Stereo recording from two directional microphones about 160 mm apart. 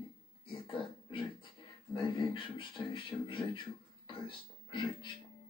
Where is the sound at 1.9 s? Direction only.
30° left (ahead or behind).